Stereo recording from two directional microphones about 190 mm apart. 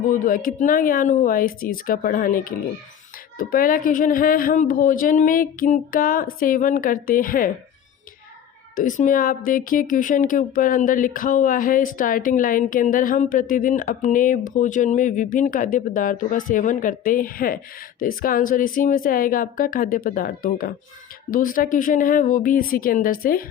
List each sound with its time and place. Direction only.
0.1 s speech: 45° left (ahead or behind)
8.7 s speech: 45° left (ahead or behind)